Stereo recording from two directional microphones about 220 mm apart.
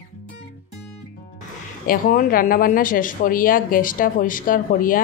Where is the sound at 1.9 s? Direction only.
40° left (ahead or behind).